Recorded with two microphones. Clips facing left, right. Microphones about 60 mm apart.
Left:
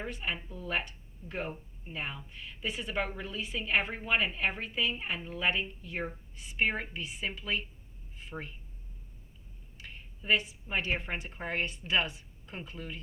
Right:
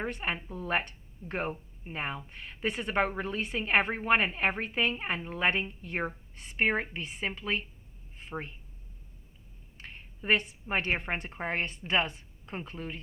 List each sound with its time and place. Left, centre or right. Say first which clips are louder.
0.0 s speech: right 3 dB; right
8.1 s a sound: right 3 dB; right
9.7 s a woman's voice: right 2 dB; right